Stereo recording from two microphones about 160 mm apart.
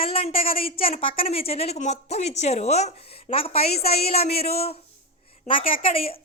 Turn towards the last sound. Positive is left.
turn(degrees=35)  # may be behind; listen again after turning